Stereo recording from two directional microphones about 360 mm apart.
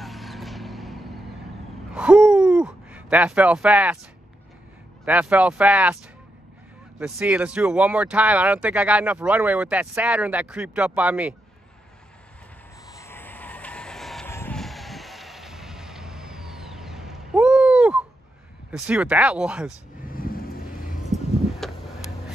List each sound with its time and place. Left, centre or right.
0.0 s vehicle: centre
2.0 s a sound: centre
5.0 s speech: centre
7.0 s speech: centre
12.8 s vehicle: centre
18.7 s speech: centre
20.1 s vehicle: left
21.6 s a sound: centre